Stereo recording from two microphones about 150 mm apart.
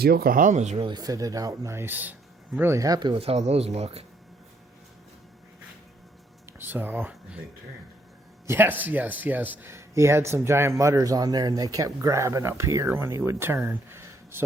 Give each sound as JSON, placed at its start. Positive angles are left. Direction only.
{"t": 0.0, "sound": "speech", "side_deg": -90}
{"t": 0.8, "sound": "speech", "side_deg": -30}
{"t": 6.6, "sound": "speech", "side_deg": -15}
{"t": 8.4, "sound": "speech", "side_deg": -15}